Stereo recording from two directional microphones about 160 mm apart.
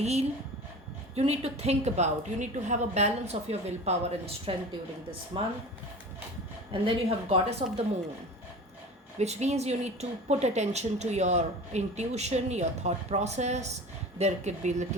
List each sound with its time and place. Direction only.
0.0 s a woman's voice: 40° right (ahead or behind)
6.8 s speech: 40° right (ahead or behind)
9.1 s a woman's voice: 45° right (ahead or behind)